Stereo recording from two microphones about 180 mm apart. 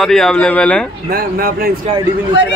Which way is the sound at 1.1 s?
55° right (ahead or behind).